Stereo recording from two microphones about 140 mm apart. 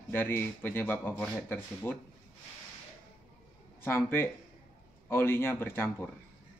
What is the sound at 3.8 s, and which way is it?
Speech, 15° left (ahead or behind).